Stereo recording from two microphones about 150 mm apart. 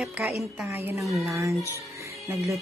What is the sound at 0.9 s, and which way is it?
Music, centre (ahead or behind).